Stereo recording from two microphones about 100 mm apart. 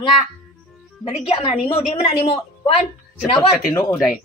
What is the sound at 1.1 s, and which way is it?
A woman's voice, 70° left (ahead or behind).